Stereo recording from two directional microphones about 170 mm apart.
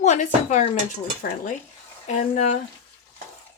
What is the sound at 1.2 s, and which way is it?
Cutlery, 60° left (ahead or behind).